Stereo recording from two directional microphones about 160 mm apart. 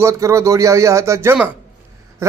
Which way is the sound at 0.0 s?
20° right (ahead or behind).